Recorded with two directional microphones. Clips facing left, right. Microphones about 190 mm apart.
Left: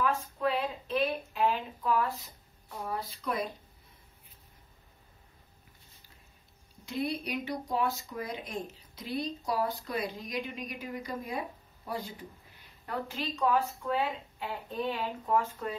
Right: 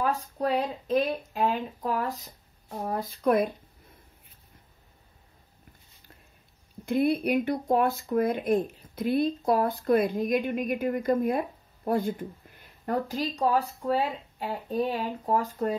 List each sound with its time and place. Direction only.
0.0 s speech: 40° right (ahead or behind)
6.9 s speech: 55° right (ahead or behind)